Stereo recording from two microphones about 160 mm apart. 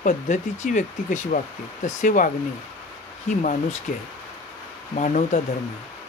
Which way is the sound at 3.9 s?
55° left (ahead or behind).